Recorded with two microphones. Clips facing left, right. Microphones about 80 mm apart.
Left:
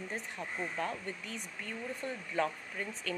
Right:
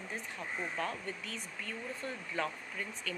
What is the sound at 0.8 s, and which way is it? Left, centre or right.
Speech, left.